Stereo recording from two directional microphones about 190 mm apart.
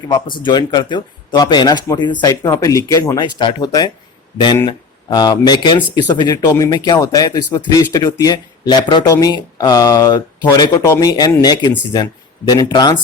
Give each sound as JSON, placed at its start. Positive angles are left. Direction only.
{"t": 0.1, "sound": "speech", "side_deg": 25}